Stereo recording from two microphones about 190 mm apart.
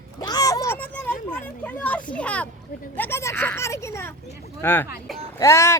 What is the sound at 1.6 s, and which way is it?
Speech, 10° left (ahead or behind).